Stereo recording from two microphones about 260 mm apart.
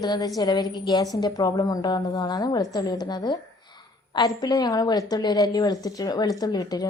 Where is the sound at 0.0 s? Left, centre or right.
Centre.